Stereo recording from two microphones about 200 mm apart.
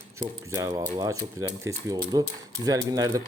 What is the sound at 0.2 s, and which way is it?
Speech, 15° right (ahead or behind).